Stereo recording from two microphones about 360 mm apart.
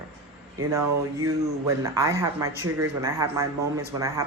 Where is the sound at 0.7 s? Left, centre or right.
Right.